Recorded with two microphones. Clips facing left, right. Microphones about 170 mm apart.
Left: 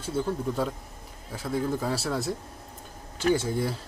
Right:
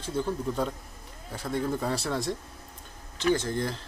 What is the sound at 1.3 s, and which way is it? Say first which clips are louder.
Speech: left 1 dB; 5° left (ahead or behind).